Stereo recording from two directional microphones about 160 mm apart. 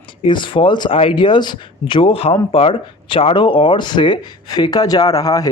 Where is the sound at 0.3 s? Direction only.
30° left (ahead or behind).